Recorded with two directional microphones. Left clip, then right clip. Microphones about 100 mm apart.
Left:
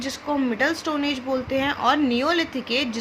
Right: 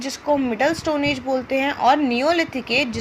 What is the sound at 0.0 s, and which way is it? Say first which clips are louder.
A woman's voice: right 4 dB; 40° right (ahead or behind).